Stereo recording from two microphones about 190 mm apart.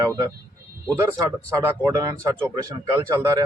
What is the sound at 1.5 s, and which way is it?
Speech, 15° right (ahead or behind).